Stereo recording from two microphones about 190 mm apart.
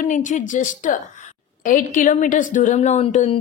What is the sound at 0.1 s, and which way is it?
A woman's voice, 40° left (ahead or behind).